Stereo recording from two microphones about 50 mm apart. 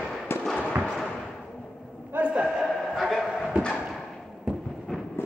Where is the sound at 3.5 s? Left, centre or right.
Right.